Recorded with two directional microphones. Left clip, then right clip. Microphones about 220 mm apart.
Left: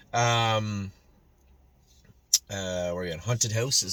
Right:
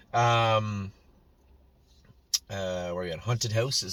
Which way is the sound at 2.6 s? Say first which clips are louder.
Left 1 dB; 20° left (ahead or behind).